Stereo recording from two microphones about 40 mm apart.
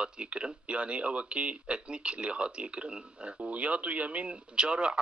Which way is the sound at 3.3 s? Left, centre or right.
Right.